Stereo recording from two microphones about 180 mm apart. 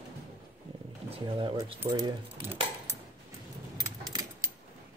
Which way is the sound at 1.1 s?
25° right (ahead or behind).